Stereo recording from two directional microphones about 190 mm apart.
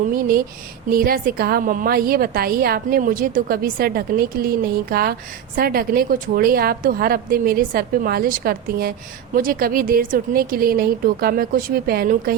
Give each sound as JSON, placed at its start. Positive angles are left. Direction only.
{"t": 0.1, "sound": "a woman's voice", "side_deg": -50}